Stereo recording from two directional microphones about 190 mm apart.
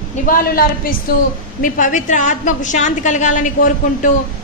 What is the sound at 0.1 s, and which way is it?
A woman's voice, 45° left (ahead or behind).